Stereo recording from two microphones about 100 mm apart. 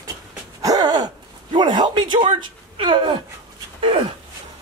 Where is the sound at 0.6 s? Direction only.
40° right (ahead or behind).